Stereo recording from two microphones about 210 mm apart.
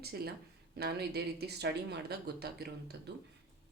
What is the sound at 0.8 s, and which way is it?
Speech, 50° right (ahead or behind).